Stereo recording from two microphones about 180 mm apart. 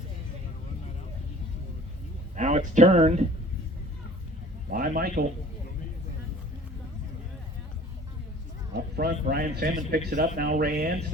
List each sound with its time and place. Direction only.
2.3 s speech: 45° right (ahead or behind)
4.7 s a man's voice: 55° right (ahead or behind)
8.7 s speech: 55° right (ahead or behind)